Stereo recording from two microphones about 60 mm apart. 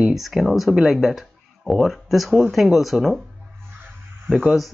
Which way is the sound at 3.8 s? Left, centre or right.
Right.